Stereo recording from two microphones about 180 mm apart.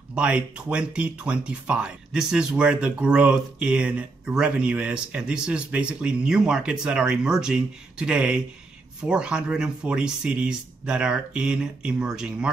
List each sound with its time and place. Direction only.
0.1 s speech: 5° right (ahead or behind)